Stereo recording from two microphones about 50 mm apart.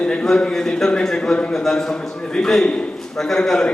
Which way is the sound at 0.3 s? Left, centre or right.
Centre.